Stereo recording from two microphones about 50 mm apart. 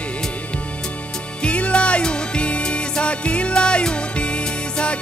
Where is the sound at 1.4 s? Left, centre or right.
Left.